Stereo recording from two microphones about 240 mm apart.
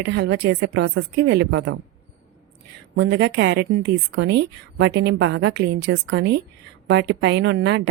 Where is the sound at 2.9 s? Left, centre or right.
Right.